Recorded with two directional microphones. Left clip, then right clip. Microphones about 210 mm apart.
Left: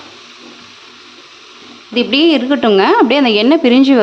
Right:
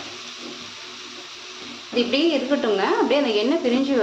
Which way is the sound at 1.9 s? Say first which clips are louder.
Left 9 dB; 55° left (ahead or behind).